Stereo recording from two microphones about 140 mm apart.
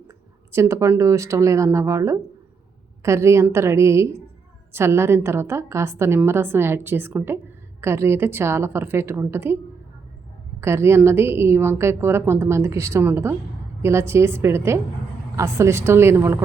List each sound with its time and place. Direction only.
0.5 s a woman's voice: 20° right (ahead or behind)
10.6 s a woman's voice: 20° right (ahead or behind)